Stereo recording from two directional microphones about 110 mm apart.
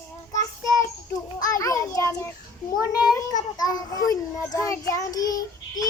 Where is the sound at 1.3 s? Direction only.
35° left (ahead or behind).